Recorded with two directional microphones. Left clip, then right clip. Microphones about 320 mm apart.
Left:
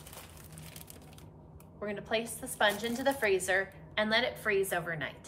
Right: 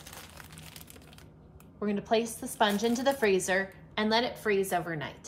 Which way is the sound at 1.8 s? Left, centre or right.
Centre.